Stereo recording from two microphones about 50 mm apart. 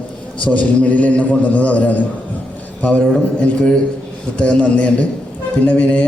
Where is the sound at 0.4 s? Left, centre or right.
Left.